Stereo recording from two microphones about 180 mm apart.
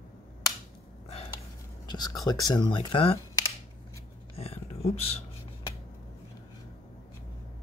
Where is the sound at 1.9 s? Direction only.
20° left (ahead or behind).